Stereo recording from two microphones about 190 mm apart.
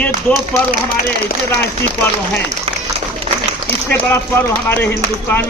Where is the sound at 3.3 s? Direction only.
35° right (ahead or behind).